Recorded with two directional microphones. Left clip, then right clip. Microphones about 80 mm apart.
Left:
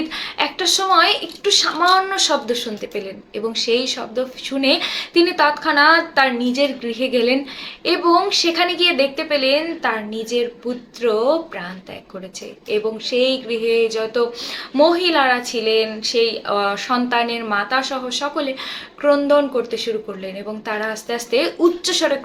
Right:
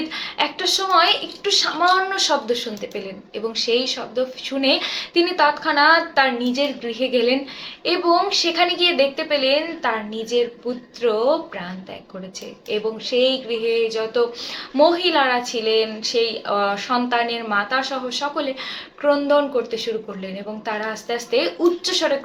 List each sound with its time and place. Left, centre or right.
0.1 s speech: left
12.6 s speech: left